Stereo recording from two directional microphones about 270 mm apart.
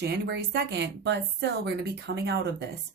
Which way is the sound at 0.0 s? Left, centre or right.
Right.